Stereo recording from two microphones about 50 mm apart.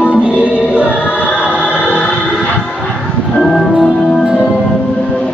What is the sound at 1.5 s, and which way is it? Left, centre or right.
Choir, right.